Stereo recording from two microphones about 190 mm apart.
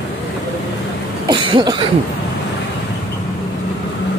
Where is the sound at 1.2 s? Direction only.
25° right (ahead or behind).